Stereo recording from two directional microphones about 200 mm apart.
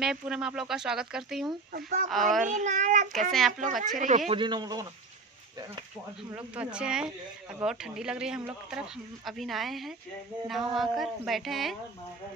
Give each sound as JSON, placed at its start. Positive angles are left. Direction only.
{"t": 0.0, "sound": "speech", "side_deg": -5}
{"t": 1.7, "sound": "speech", "side_deg": -45}
{"t": 2.0, "sound": "speech", "side_deg": 0}
{"t": 2.4, "sound": "a child's voice", "side_deg": -40}
{"t": 3.3, "sound": "speech", "side_deg": 0}
{"t": 3.8, "sound": "a child's voice", "side_deg": -40}
{"t": 4.3, "sound": "a man's voice", "side_deg": -25}
{"t": 6.3, "sound": "speech", "side_deg": -5}